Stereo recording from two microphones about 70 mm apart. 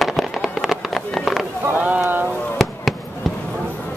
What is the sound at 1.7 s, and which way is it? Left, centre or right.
Speech, right.